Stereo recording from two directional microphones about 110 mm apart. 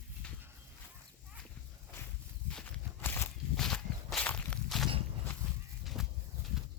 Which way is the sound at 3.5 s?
5° left (ahead or behind).